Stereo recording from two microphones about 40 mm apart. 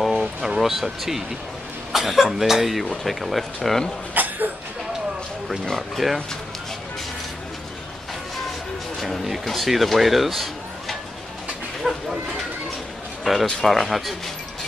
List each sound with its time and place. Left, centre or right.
0.0 s a sound: centre
0.6 s speech: centre
4.1 s a sound: right
5.8 s speech: centre
9.0 s speech: centre
11.8 s speech: centre
13.2 s speech: centre